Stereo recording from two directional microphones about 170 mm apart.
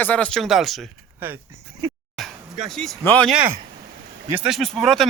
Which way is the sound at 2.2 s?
Centre (ahead or behind).